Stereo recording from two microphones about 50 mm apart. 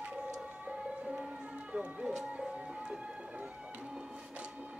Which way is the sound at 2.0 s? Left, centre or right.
Centre.